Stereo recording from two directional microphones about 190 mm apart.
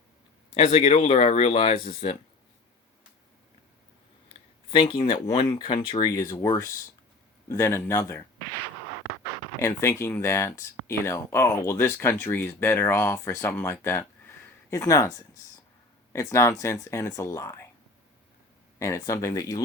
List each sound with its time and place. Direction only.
0.5 s speech: 35° left (ahead or behind)
4.7 s speech: 25° left (ahead or behind)
9.6 s speech: 15° left (ahead or behind)
16.1 s speech: 15° left (ahead or behind)
18.8 s speech: 15° left (ahead or behind)